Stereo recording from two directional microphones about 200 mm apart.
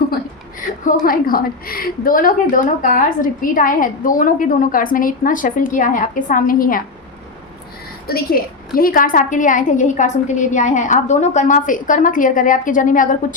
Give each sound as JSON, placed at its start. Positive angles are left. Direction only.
{"t": 0.9, "sound": "a woman's voice", "side_deg": 45}
{"t": 8.0, "sound": "a woman's voice", "side_deg": 50}